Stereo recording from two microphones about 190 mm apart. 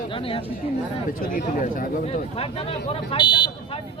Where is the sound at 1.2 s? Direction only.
50° left (ahead or behind).